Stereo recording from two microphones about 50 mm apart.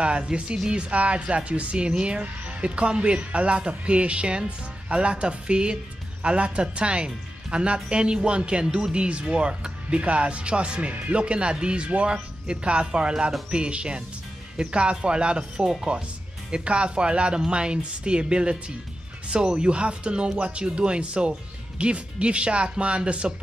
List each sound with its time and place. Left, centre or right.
0.0 s speech: right